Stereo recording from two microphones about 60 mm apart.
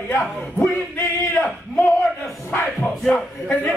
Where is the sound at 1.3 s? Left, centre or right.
Left.